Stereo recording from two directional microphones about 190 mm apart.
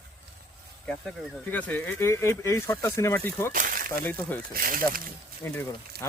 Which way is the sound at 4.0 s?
10° left (ahead or behind).